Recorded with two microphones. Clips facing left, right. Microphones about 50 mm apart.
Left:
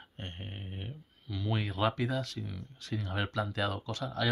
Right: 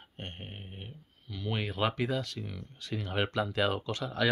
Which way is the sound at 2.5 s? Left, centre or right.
Right.